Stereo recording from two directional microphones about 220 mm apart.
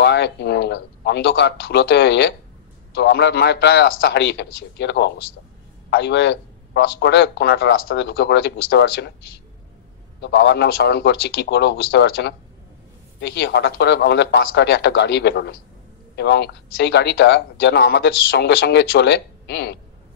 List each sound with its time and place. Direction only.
0.0 s a man's voice: 50° left (ahead or behind)
10.2 s speech: 50° left (ahead or behind)